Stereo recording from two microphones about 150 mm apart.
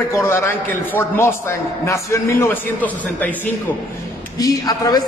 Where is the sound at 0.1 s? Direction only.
20° left (ahead or behind).